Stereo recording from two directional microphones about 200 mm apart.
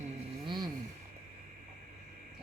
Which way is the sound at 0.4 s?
20° right (ahead or behind).